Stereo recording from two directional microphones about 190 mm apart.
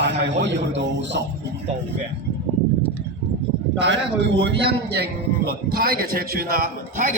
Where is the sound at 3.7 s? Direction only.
65° right (ahead or behind); by 7.1 s 45° right (ahead or behind).